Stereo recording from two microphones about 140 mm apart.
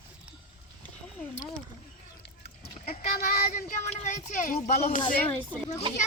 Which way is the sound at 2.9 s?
90° left.